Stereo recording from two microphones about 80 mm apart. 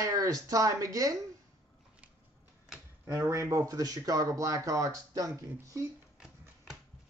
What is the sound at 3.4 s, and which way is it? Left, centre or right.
Speech, right.